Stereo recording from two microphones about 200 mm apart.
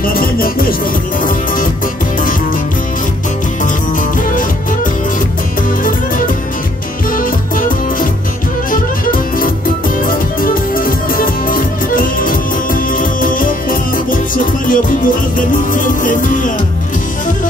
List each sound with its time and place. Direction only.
0.0 s music: 45° left (ahead or behind)
5.9 s music: 45° left (ahead or behind)